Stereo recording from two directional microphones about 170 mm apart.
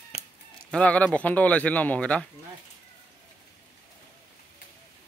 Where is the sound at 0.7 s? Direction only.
5° left (ahead or behind).